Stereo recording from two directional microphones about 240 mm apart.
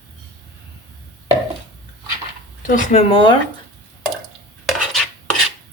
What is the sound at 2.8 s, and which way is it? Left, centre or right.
Speech, left.